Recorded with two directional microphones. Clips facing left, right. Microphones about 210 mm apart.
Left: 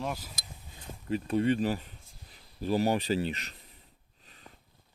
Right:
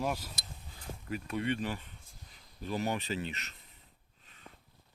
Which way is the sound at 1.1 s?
30° left (ahead or behind).